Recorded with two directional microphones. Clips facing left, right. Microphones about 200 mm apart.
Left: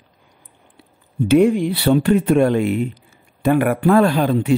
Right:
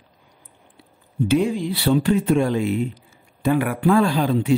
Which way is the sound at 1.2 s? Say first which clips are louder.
Left 6 dB; 60° left (ahead or behind).